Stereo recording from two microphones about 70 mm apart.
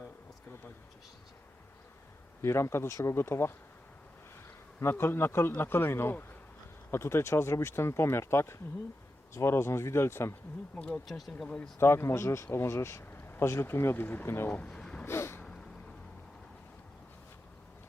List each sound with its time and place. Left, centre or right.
2.4 s speech: left
4.8 s speech: left
10.8 s speech: centre
11.0 s speech: centre
11.8 s speech: left
12.5 s speech: left
14.5 s speech: centre
14.8 s a sound: centre
15.0 s a sound: left